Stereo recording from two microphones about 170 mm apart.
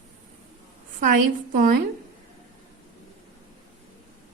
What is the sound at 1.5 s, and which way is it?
Speech, 55° right (ahead or behind).